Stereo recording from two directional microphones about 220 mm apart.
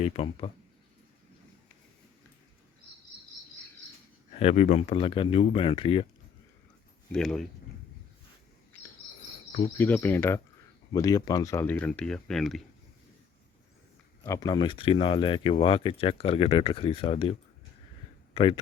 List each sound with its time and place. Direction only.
0.0 s speech: 25° left (ahead or behind)
4.4 s speech: 30° left (ahead or behind)
7.1 s speech: centre (ahead or behind)
9.7 s speech: 10° left (ahead or behind)
14.3 s speech: 20° left (ahead or behind)
18.3 s speech: 25° left (ahead or behind)